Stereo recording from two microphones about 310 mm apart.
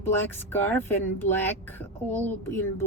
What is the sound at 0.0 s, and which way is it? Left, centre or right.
Speech, centre.